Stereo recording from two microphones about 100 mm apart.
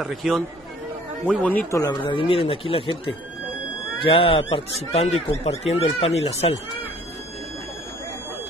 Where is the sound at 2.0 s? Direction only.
65° left (ahead or behind).